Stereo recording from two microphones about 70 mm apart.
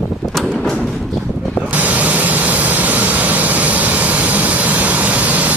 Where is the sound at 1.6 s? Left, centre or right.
Right.